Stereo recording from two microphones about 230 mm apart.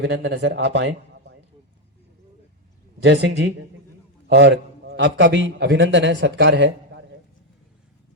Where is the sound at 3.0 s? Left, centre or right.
Right.